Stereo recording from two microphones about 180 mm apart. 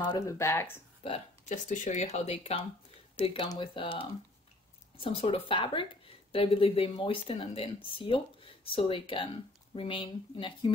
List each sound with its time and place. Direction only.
0.1 s speech: 15° left (ahead or behind)
1.5 s a woman's voice: 45° left (ahead or behind); by 10.7 s 25° left (ahead or behind)